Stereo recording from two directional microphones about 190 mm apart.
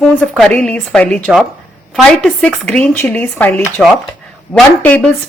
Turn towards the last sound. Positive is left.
turn(degrees=5)  # may be behind; listen again after turning